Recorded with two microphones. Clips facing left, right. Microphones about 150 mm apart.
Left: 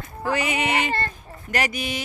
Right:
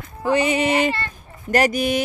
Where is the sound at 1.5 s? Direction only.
45° right (ahead or behind).